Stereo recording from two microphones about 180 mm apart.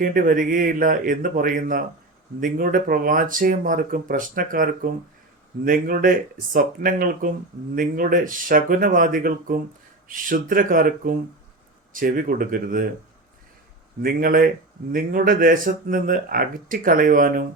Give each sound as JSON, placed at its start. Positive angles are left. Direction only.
{"t": 0.0, "sound": "speech", "side_deg": -50}
{"t": 14.0, "sound": "speech", "side_deg": -55}